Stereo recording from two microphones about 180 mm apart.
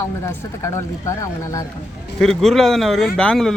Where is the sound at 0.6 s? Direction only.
15° left (ahead or behind).